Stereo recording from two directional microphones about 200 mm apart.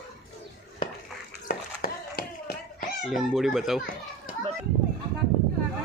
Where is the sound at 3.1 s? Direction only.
Centre (ahead or behind).